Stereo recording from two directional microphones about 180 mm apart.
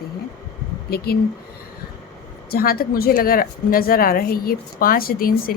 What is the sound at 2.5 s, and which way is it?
A woman's voice, 55° left (ahead or behind).